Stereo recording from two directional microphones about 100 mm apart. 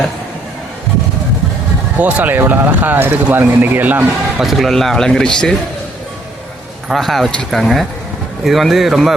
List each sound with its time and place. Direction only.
2.0 s speech: 15° right (ahead or behind)
4.4 s speech: centre (ahead or behind)
6.8 s speech: centre (ahead or behind)